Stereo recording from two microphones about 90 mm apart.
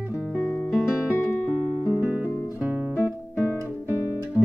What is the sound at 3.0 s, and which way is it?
Music, 25° left (ahead or behind).